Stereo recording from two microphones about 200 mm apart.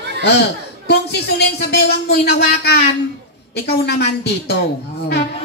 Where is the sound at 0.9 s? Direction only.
55° left (ahead or behind).